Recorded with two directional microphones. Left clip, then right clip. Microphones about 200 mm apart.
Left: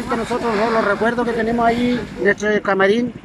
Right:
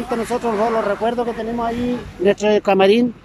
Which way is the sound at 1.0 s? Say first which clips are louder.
Left 2 dB; 5° right (ahead or behind).